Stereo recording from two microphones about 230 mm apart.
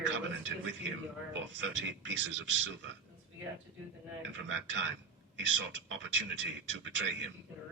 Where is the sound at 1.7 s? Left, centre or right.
Right.